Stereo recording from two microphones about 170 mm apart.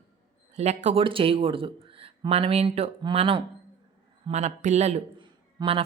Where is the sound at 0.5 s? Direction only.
40° right (ahead or behind).